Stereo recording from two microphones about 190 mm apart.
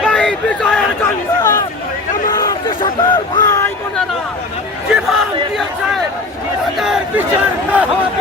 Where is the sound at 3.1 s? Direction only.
20° left (ahead or behind).